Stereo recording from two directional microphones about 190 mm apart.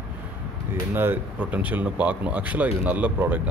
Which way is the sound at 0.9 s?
10° right (ahead or behind).